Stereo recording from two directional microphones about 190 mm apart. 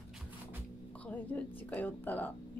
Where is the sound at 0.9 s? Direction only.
5° left (ahead or behind).